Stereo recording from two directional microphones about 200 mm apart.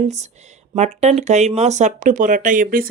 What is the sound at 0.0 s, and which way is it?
Speech, 35° right (ahead or behind).